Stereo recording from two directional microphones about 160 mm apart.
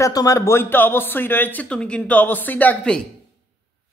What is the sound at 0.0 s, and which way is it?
Speech, 20° left (ahead or behind).